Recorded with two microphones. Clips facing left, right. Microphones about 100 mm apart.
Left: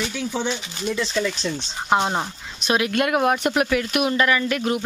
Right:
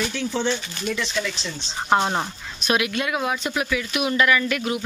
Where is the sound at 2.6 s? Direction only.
25° left (ahead or behind).